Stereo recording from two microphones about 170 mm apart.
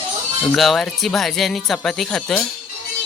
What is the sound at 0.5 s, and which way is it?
Speech, centre (ahead or behind).